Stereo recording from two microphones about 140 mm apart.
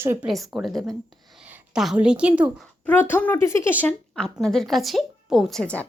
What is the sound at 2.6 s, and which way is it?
Speech, 10° left (ahead or behind).